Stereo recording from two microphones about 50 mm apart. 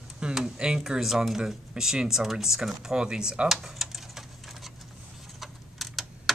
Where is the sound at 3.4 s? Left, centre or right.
Centre.